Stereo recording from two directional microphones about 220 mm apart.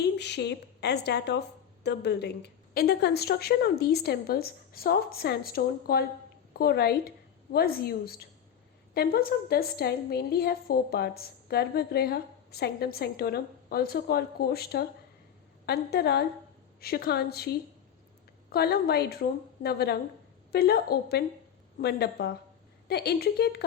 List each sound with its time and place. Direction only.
0.0 s a woman's voice: 50° left (ahead or behind)
18.5 s a woman's voice: 45° left (ahead or behind)